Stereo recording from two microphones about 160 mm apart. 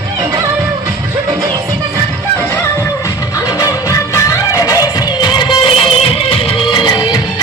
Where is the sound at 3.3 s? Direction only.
20° left (ahead or behind).